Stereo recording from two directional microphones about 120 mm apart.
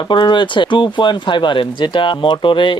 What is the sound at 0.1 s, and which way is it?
Speech, 40° left (ahead or behind).